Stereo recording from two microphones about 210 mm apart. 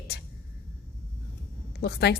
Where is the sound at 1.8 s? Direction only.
50° left (ahead or behind).